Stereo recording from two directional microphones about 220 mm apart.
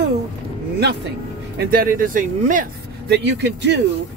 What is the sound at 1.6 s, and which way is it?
Speech, 40° right (ahead or behind).